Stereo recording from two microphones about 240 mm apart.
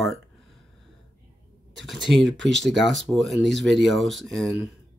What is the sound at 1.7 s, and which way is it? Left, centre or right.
Speech, centre.